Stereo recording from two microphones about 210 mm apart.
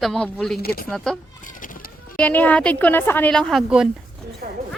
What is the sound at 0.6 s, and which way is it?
Speech, 45° left (ahead or behind).